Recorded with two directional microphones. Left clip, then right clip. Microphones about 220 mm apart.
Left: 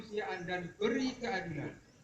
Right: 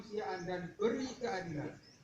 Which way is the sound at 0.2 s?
40° left (ahead or behind).